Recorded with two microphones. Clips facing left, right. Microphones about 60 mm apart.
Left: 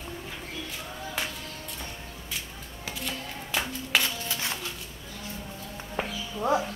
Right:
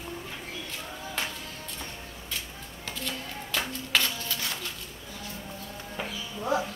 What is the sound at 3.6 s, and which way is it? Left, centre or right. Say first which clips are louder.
Clapping: even; centre.